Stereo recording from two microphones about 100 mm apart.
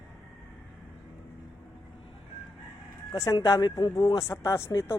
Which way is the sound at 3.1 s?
35° left (ahead or behind).